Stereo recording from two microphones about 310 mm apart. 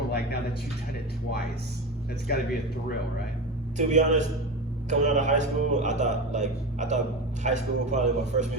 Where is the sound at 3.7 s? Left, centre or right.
Right.